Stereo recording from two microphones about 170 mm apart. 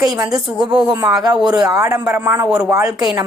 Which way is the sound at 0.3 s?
5° right (ahead or behind).